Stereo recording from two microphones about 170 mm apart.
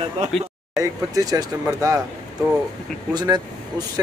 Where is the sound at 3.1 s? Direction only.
25° right (ahead or behind).